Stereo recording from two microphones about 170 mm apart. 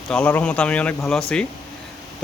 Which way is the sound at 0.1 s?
5° left (ahead or behind).